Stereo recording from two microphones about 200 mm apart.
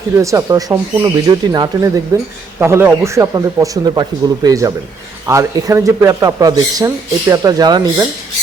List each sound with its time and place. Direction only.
0.2 s speech: 15° right (ahead or behind)